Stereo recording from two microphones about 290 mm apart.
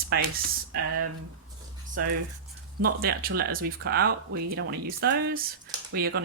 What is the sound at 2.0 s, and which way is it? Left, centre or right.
Speech, right.